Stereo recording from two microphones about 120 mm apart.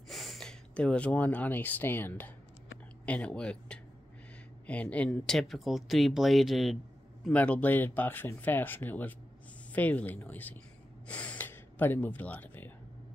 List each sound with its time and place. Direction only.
0.1 s speech: centre (ahead or behind)
7.2 s speech: 10° left (ahead or behind)
11.1 s gasp: 10° left (ahead or behind)